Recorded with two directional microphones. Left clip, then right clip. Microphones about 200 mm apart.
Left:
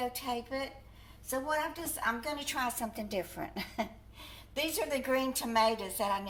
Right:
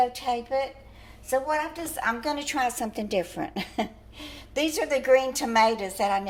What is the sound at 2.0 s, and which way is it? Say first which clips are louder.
A woman's voice: right 7 dB; 45° right (ahead or behind).